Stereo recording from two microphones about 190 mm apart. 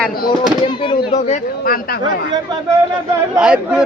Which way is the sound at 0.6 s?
30° left (ahead or behind).